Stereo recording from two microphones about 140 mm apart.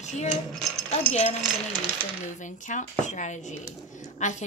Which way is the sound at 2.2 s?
60° left (ahead or behind).